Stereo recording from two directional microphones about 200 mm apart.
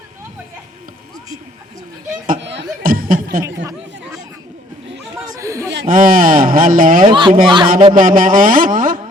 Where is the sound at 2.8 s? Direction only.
45° right (ahead or behind).